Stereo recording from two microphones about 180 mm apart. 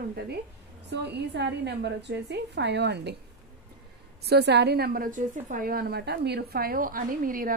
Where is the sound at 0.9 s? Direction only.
70° right (ahead or behind).